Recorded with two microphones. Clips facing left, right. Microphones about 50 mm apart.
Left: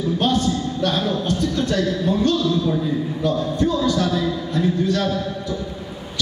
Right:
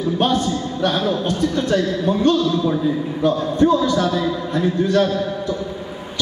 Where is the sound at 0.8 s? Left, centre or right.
Right.